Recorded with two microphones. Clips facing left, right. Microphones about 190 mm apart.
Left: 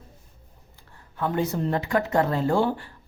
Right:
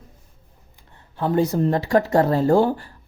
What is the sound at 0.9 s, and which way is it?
Speech, 25° right (ahead or behind).